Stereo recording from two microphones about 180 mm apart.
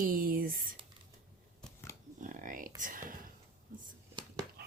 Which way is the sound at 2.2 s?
45° right (ahead or behind).